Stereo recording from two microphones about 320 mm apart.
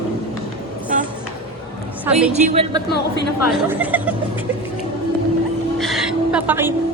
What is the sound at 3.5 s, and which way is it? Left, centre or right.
Speech, centre.